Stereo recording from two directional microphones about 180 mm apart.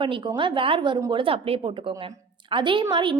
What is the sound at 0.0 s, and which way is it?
A woman's voice, 25° right (ahead or behind).